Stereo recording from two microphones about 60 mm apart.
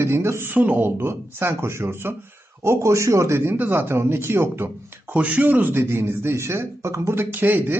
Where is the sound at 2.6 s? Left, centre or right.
Right.